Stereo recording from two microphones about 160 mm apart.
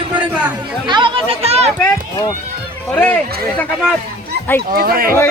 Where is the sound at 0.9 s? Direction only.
30° right (ahead or behind).